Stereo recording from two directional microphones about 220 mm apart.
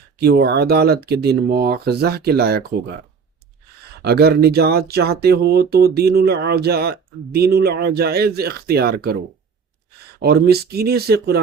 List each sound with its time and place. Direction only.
0.2 s speech: 50° right (ahead or behind)
4.0 s speech: 45° right (ahead or behind)
10.2 s speech: 45° right (ahead or behind)